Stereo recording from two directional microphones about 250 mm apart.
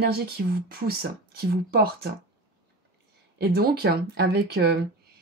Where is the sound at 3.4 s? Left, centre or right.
Right.